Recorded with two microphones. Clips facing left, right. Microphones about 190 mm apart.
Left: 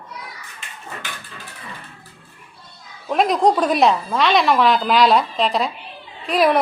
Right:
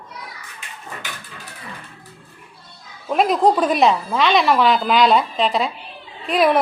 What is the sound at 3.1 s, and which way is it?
A woman's voice, centre (ahead or behind).